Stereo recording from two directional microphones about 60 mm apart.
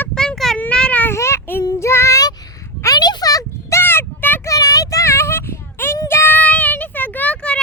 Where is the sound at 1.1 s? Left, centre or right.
Left.